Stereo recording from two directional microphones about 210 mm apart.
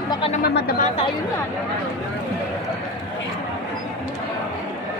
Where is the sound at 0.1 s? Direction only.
25° left (ahead or behind).